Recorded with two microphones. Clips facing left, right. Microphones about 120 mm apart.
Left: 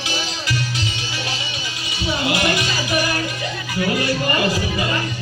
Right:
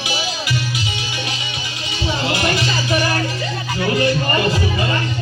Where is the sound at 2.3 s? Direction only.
30° right (ahead or behind).